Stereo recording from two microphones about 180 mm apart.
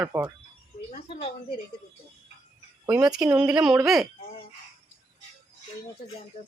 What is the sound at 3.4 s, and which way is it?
Speech, 5° right (ahead or behind).